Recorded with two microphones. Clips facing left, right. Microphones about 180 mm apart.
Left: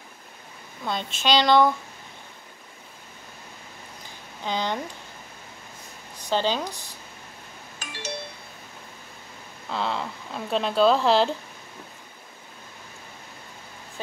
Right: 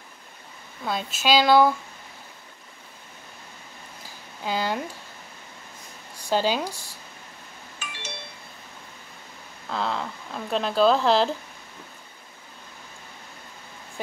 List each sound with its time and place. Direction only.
0.8 s speech: 5° right (ahead or behind)
4.5 s speech: 5° right (ahead or behind)
6.1 s speech: 10° right (ahead or behind)
7.8 s doorbell: 40° left (ahead or behind)
9.7 s speech: centre (ahead or behind)